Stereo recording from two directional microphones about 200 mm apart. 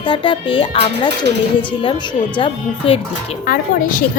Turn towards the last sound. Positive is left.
turn(degrees=40)  # may be behind; listen again after turning